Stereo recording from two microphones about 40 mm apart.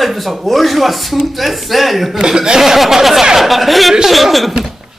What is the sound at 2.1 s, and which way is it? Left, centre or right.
Speech, centre.